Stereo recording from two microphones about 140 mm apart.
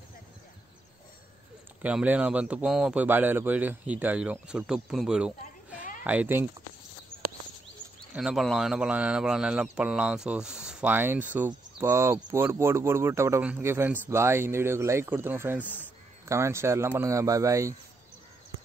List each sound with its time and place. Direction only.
1.8 s speech: 10° right (ahead or behind)
8.1 s speech: 5° right (ahead or behind)
15.6 s a man's voice: 15° left (ahead or behind)
16.3 s speech: 20° right (ahead or behind)